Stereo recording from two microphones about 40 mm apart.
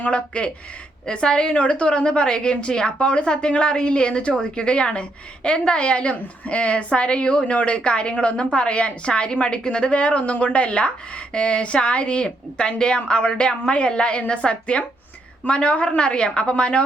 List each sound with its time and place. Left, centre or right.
0.0 s a woman's voice: left